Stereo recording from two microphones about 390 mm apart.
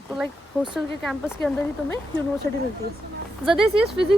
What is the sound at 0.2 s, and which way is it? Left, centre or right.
Speech, centre.